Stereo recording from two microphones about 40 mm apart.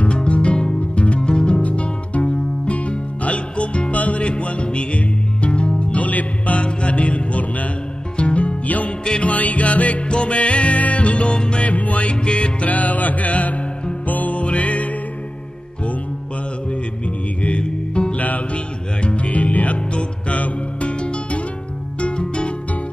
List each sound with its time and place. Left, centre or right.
0.0 s music: left
1.6 s music: left
6.6 s music: left
8.6 s music: left
11.6 s music: left
12.6 s music: left
17.4 s music: left
18.1 s music: left